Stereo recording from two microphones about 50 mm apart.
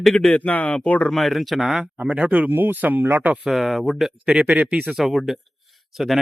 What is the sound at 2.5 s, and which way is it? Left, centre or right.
Speech, right.